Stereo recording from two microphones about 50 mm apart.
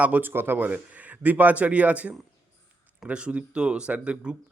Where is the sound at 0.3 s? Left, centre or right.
Right.